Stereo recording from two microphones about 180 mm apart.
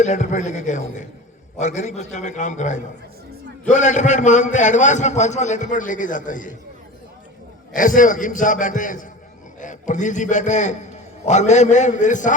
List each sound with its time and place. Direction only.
0.0 s a man's voice: 40° left (ahead or behind)
7.7 s a man's voice: 45° left (ahead or behind)